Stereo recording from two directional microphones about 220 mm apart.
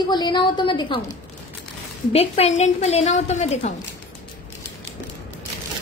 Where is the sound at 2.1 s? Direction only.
30° left (ahead or behind).